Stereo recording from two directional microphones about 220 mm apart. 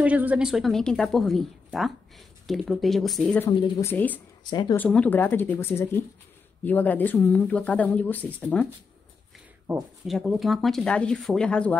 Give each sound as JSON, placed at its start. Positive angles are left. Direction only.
{"t": 0.0, "sound": "a woman's voice", "side_deg": -5}
{"t": 3.4, "sound": "speech", "side_deg": 15}
{"t": 4.5, "sound": "speech", "side_deg": 20}
{"t": 4.7, "sound": "speech", "side_deg": 5}
{"t": 9.7, "sound": "a woman's voice", "side_deg": 0}